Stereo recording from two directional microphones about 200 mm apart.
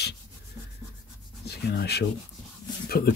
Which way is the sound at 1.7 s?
55° left (ahead or behind).